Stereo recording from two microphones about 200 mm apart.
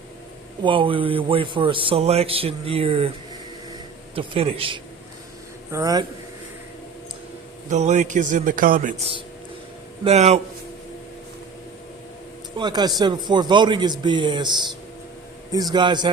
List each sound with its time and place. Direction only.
0.6 s a man's voice: 25° right (ahead or behind)
4.1 s a man's voice: 30° right (ahead or behind)
5.7 s a man's voice: 15° right (ahead or behind)
7.7 s a man's voice: 35° right (ahead or behind)
10.0 s a man's voice: 35° right (ahead or behind)
12.5 s a man's voice: 20° right (ahead or behind)
15.5 s a man's voice: 20° right (ahead or behind)